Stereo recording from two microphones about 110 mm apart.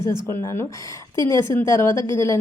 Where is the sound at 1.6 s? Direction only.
25° left (ahead or behind).